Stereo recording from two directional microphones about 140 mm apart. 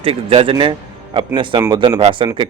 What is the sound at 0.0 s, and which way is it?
A man's voice, 45° right (ahead or behind).